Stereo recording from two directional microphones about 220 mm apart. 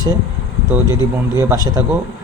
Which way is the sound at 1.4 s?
15° right (ahead or behind).